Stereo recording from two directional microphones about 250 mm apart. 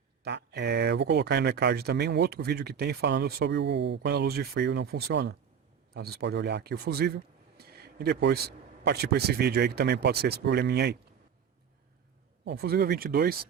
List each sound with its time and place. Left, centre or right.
0.3 s speech: right
12.5 s speech: right